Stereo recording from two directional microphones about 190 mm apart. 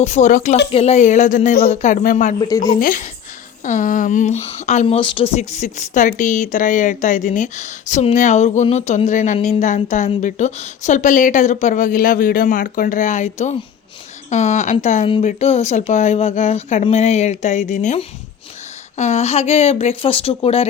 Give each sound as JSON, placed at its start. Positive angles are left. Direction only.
{"t": 0.0, "sound": "speech", "side_deg": 35}